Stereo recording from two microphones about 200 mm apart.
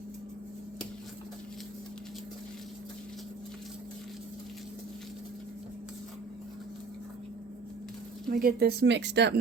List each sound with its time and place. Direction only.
8.3 s speech: 45° right (ahead or behind)